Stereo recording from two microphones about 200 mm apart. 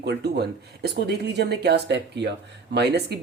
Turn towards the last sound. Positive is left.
turn(degrees=-55)  # may be behind; listen again after turning